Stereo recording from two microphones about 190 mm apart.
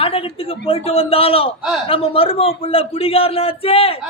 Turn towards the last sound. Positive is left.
turn(degrees=30)  # may be behind; listen again after turning